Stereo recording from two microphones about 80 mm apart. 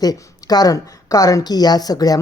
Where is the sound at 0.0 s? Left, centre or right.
Left.